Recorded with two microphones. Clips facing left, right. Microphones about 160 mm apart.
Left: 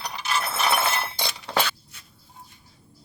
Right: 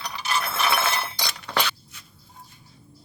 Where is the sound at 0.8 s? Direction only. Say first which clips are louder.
Even; 30° left (ahead or behind).